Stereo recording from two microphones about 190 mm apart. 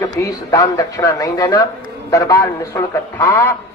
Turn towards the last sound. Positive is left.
turn(degrees=15)  # may be behind; listen again after turning